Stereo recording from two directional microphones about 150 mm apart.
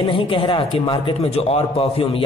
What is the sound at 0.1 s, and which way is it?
A man's voice, 35° left (ahead or behind).